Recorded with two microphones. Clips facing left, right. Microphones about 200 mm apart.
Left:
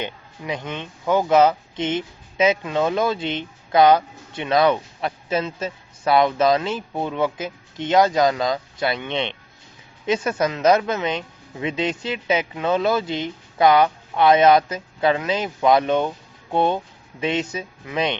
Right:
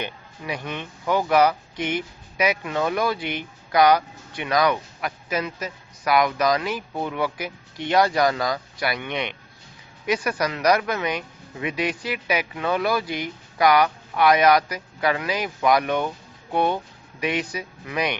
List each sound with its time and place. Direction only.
0.0 s speech: 20° left (ahead or behind)